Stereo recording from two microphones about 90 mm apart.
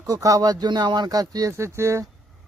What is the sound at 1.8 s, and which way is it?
Speech, 30° right (ahead or behind).